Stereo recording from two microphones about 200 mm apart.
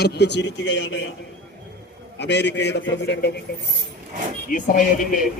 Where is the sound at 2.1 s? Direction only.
60° left (ahead or behind).